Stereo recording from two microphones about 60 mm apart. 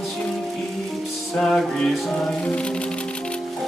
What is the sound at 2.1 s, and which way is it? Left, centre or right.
Music, left.